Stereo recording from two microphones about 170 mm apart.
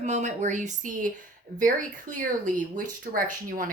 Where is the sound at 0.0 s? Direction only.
45° right (ahead or behind).